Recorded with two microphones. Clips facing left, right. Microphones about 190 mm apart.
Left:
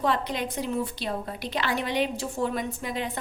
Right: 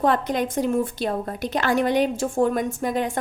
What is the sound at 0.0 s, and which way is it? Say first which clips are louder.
A woman's voice: right 6 dB; 50° right (ahead or behind).